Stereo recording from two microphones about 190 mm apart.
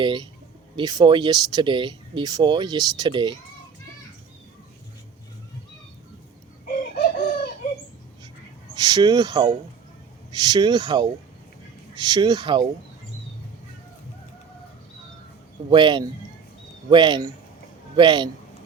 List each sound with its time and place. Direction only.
0.0 s speech: 25° right (ahead or behind)
6.7 s chicken: 50° left (ahead or behind)
8.7 s speech: 20° right (ahead or behind)
15.7 s speech: 25° right (ahead or behind)